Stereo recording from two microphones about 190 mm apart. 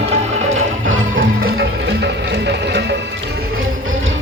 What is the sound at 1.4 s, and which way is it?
Music, 55° right (ahead or behind).